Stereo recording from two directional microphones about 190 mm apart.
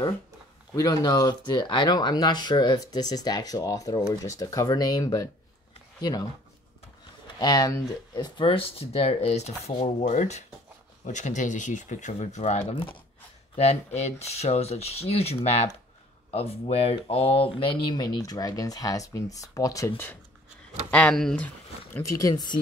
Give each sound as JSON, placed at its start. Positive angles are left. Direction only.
{"t": 0.7, "sound": "speech", "side_deg": 20}
{"t": 7.3, "sound": "speech", "side_deg": 20}
{"t": 21.9, "sound": "speech", "side_deg": 15}